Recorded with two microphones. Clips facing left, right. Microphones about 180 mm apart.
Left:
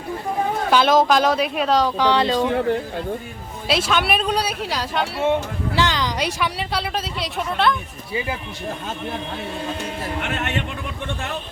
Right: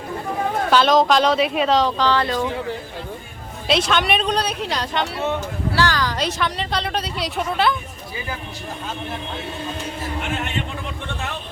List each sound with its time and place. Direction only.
0.7 s speech: 10° left (ahead or behind)
2.0 s speech: 15° left (ahead or behind)
2.4 s speech: 60° left (ahead or behind)
3.7 s speech: 5° left (ahead or behind)
5.2 s speech: 20° left (ahead or behind); by 7.8 s 5° right (ahead or behind)